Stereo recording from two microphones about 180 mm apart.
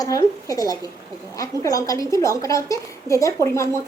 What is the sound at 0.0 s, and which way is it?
A woman's voice, 20° left (ahead or behind).